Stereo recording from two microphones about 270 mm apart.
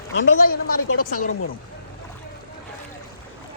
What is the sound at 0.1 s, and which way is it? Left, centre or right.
A woman's voice, left.